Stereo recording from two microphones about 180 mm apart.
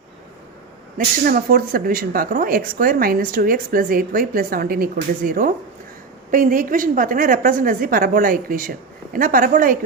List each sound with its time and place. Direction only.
0.9 s speech: 50° right (ahead or behind)